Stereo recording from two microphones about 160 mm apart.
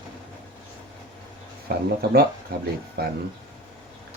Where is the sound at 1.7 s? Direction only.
75° right (ahead or behind).